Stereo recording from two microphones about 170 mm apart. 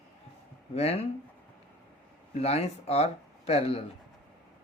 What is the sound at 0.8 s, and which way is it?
Speech, 35° left (ahead or behind).